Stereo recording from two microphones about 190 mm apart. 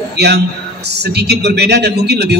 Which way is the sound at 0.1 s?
60° right (ahead or behind).